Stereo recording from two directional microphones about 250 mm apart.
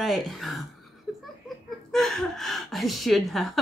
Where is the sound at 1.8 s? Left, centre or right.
Centre.